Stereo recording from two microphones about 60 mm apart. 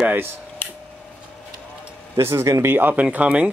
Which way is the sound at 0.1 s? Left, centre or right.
Right.